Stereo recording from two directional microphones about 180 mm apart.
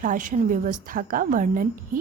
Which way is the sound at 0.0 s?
45° right (ahead or behind).